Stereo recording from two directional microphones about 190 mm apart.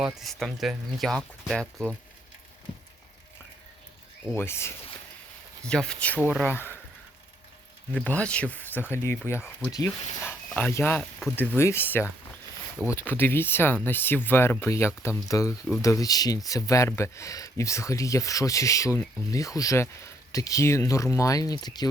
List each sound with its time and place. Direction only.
0.0 s speech: centre (ahead or behind)
4.4 s speech: 15° left (ahead or behind)
6.1 s speech: 5° right (ahead or behind)
6.4 s speech: 10° left (ahead or behind)
7.9 s speech: 5° left (ahead or behind)